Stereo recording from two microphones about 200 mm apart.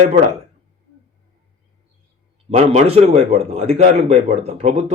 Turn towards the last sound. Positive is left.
turn(degrees=-35)  # may be behind; listen again after turning